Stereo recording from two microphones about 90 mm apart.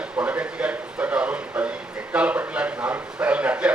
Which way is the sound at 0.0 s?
15° right (ahead or behind).